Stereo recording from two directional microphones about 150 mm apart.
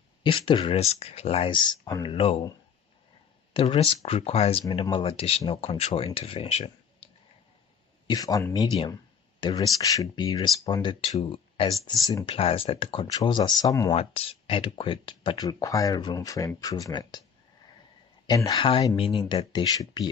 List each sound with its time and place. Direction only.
0.2 s speech: 35° left (ahead or behind)
2.0 s speech: 40° left (ahead or behind)
3.5 s speech: 40° left (ahead or behind)
8.1 s speech: 25° left (ahead or behind)
13.9 s speech: 40° left (ahead or behind); by 17.2 s 25° left (ahead or behind)
18.2 s speech: 25° left (ahead or behind)